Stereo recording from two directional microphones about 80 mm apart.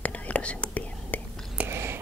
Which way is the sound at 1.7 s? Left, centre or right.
Right.